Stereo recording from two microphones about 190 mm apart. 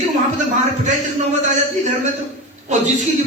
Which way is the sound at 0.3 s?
40° right (ahead or behind).